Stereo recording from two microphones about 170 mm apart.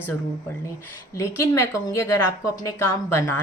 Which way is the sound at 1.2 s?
15° left (ahead or behind).